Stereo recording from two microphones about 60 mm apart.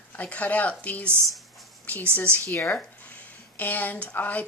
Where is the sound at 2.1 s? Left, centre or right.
Left.